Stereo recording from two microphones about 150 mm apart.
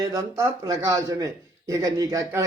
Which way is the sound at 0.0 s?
20° right (ahead or behind).